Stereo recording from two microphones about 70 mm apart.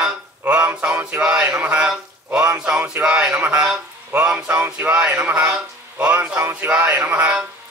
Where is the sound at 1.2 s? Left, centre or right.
Centre.